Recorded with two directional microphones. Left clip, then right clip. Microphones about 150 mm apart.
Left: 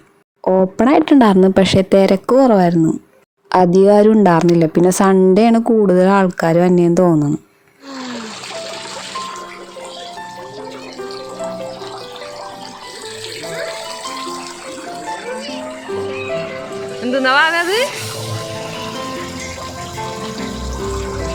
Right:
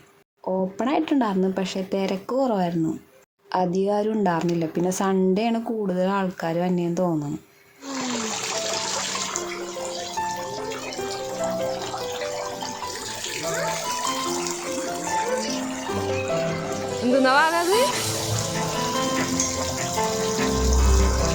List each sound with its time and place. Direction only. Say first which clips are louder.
0.4 s speech: left 12 dB; 45° left (ahead or behind)
17.1 s speech: left 5 dB; centre (ahead or behind)